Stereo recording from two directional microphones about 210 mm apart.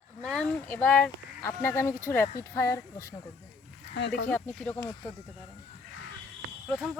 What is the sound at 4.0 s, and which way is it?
Speech, 55° left (ahead or behind).